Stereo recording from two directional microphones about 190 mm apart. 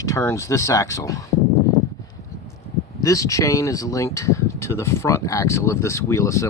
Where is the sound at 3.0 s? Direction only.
15° left (ahead or behind).